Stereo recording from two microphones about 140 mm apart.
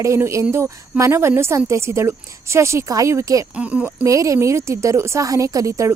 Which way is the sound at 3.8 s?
25° right (ahead or behind).